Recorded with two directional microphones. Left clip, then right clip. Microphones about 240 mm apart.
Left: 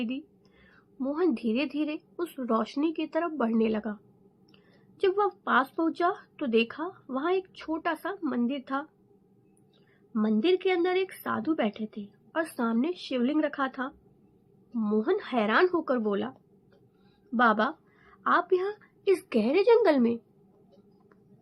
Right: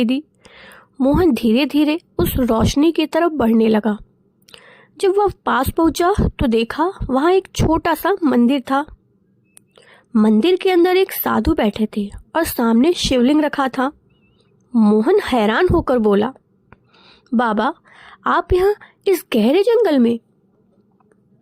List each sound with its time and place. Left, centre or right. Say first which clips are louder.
0.0 s a woman's voice: right 15 dB; right